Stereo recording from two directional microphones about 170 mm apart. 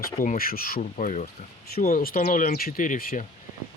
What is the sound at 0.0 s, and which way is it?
Speech, 55° left (ahead or behind).